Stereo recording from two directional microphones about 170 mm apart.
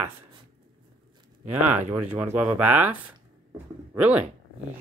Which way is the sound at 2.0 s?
10° right (ahead or behind).